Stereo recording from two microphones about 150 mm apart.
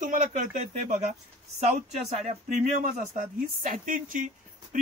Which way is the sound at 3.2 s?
65° right (ahead or behind).